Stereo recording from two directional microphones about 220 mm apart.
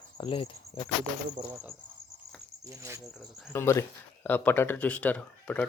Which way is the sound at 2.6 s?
15° right (ahead or behind).